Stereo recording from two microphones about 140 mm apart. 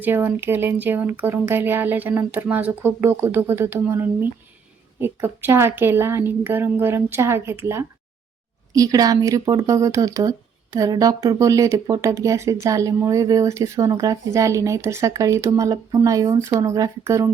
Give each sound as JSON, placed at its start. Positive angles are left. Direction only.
{"t": 0.0, "sound": "speech", "side_deg": -15}